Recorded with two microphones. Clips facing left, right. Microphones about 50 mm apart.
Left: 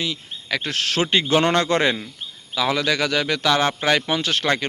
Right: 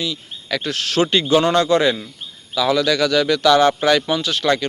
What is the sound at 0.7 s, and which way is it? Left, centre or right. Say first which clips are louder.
Speech: right 3 dB; left.